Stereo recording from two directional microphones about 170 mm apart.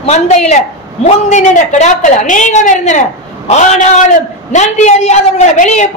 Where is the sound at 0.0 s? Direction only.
40° left (ahead or behind).